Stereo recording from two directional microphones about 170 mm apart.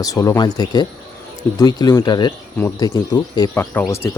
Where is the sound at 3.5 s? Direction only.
10° left (ahead or behind).